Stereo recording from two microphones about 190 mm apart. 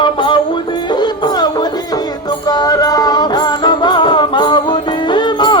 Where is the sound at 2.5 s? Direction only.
20° left (ahead or behind).